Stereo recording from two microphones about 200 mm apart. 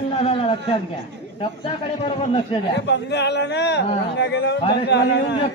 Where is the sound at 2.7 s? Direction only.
60° left (ahead or behind).